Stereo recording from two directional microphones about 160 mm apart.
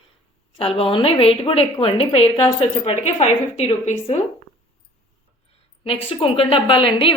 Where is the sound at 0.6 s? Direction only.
35° left (ahead or behind).